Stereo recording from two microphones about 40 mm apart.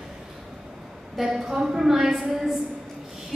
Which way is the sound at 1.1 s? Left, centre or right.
Centre.